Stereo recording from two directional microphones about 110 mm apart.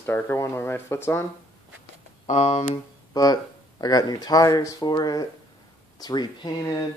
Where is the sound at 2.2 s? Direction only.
85° left.